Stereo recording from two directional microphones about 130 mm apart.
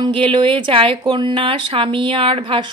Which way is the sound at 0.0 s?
40° right (ahead or behind).